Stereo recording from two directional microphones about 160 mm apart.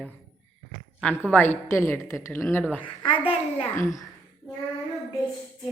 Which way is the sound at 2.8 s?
30° left (ahead or behind).